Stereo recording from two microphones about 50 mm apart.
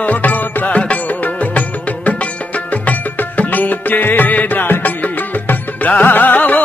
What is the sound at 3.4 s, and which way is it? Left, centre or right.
Music, left.